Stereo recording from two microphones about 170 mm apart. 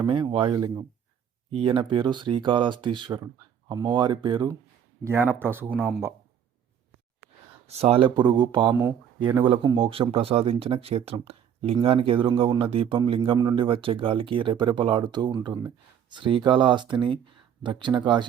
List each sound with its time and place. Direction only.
0.0 s speech: 25° right (ahead or behind)
5.0 s speech: 15° right (ahead or behind)
7.7 s speech: 35° right (ahead or behind)